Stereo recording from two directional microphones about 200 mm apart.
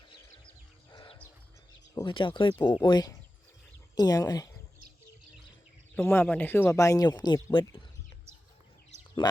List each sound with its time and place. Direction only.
0.9 s a sound: 20° left (ahead or behind)
2.0 s speech: 25° left (ahead or behind)
6.0 s speech: 10° left (ahead or behind)
9.2 s speech: 20° left (ahead or behind)